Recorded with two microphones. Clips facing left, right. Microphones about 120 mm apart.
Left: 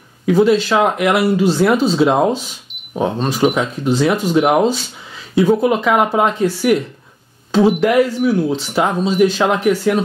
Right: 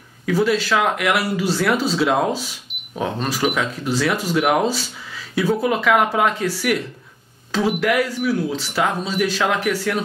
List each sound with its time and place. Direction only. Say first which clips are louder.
0.3 s speech: left 6 dB; 25° left (ahead or behind)